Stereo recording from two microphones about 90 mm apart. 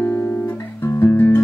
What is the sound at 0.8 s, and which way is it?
Guitar, 25° left (ahead or behind).